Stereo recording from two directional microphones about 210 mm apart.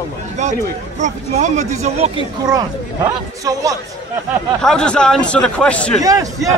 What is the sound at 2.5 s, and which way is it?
Speech, 15° right (ahead or behind).